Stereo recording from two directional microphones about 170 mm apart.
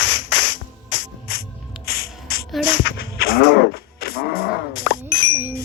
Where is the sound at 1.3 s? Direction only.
60° left (ahead or behind).